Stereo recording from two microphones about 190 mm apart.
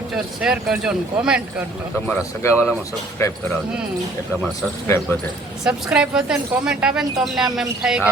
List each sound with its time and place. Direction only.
0.4 s speech: 5° right (ahead or behind)
2.0 s a man's voice: 15° left (ahead or behind)
5.6 s speech: 5° right (ahead or behind)